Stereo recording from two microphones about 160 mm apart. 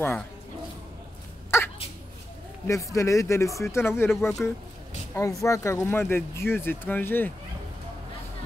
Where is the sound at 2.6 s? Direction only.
20° left (ahead or behind).